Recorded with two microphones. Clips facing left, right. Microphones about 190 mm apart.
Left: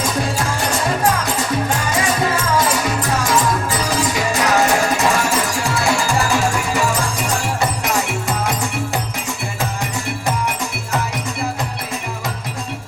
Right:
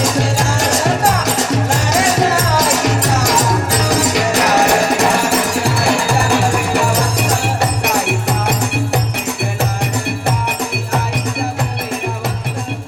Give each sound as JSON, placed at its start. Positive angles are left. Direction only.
{"t": 0.0, "sound": "music", "side_deg": -85}
{"t": 6.3, "sound": "music", "side_deg": -70}